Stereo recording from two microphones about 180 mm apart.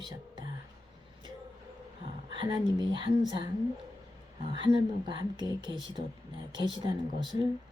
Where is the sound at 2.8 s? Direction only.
25° right (ahead or behind).